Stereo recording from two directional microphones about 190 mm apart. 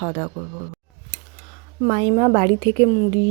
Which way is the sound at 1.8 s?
30° right (ahead or behind).